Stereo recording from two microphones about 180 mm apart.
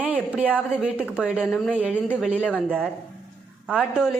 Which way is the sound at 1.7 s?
5° right (ahead or behind).